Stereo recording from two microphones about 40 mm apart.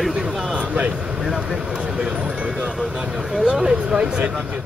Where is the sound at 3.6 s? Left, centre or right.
Right.